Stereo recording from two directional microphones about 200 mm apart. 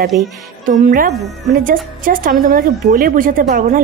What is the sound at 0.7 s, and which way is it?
A woman's voice, 40° right (ahead or behind).